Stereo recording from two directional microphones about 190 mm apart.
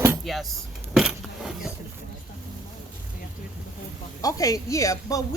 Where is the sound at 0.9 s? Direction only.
Centre (ahead or behind).